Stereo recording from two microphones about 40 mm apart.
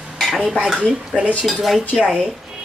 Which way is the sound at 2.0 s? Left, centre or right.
Centre.